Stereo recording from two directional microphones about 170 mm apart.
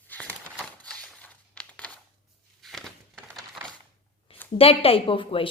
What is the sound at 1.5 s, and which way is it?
Crumpling, 5° left (ahead or behind).